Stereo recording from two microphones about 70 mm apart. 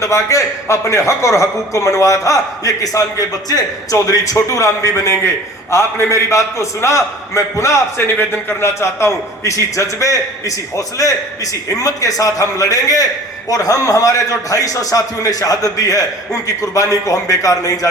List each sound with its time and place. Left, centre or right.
0.0 s a man's voice: left
7.9 s speech: left
8.6 s a man's voice: left